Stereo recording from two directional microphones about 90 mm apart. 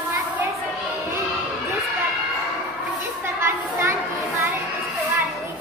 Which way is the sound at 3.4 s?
30° right (ahead or behind).